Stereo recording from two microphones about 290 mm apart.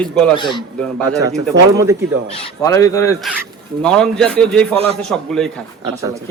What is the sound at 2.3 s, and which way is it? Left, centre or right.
Speech, centre.